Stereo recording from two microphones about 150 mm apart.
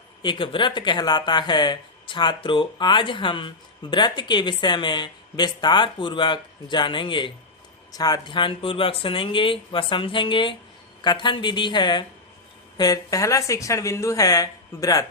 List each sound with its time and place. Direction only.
0.2 s speech: 30° left (ahead or behind)